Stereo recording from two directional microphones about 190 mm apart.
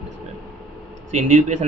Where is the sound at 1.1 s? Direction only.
40° right (ahead or behind).